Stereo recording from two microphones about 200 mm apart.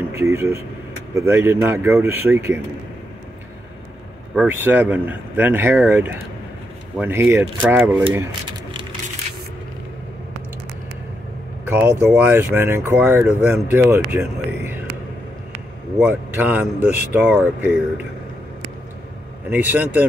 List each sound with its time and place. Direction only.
0.1 s speech: 15° right (ahead or behind)
4.4 s speech: 10° right (ahead or behind)
8.1 s a sound: 20° right (ahead or behind)
11.6 s speech: 10° right (ahead or behind)
16.0 s speech: 10° right (ahead or behind)
19.5 s speech: 10° right (ahead or behind)